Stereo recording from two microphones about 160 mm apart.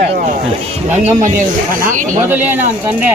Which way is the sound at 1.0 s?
55° right (ahead or behind).